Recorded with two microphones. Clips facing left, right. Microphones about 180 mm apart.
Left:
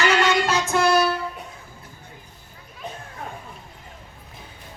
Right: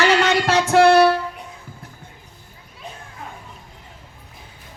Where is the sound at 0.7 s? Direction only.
65° right (ahead or behind).